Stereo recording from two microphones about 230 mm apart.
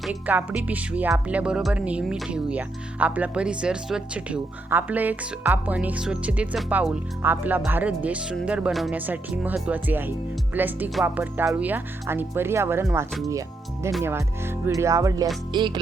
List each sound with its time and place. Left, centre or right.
0.0 s speech: centre